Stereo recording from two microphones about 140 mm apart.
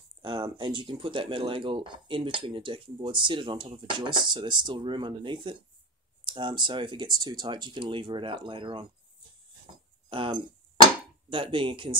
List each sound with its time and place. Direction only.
0.2 s speech: 35° right (ahead or behind)
10.0 s dishes: 35° right (ahead or behind)